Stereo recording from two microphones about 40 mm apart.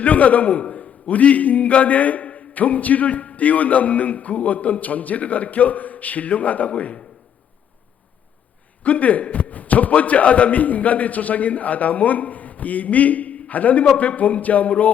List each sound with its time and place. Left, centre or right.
0.0 s a man's voice: left
8.8 s a man's voice: left